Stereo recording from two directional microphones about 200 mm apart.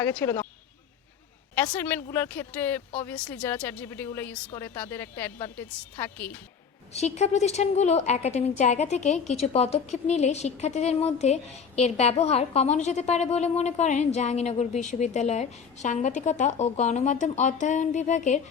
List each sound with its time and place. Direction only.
0.0 s speech: 10° left (ahead or behind)
1.5 s speech: 5° left (ahead or behind)
6.9 s a woman's voice: 35° left (ahead or behind)